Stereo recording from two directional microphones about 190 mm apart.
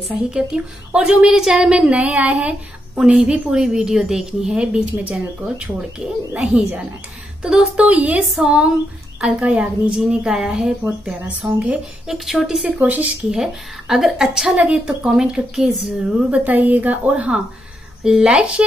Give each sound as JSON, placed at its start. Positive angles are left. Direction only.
{"t": 0.1, "sound": "a woman's voice", "side_deg": -5}